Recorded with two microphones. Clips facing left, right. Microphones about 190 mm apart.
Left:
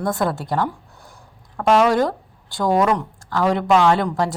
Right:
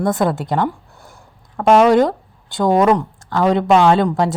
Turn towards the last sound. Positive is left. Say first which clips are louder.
# right 4 dB
turn(degrees=-25)  # may be behind; listen again after turning